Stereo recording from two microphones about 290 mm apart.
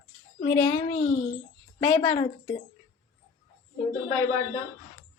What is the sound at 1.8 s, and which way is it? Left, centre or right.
Speech, centre.